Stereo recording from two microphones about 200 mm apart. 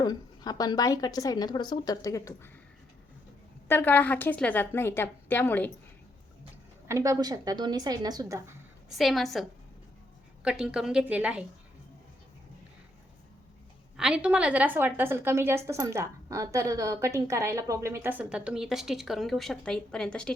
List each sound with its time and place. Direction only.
0.0 s a woman's voice: 20° left (ahead or behind)
3.7 s a woman's voice: 10° left (ahead or behind)
6.8 s a woman's voice: 15° right (ahead or behind)
8.9 s a woman's voice: centre (ahead or behind)
13.9 s a woman's voice: 5° right (ahead or behind)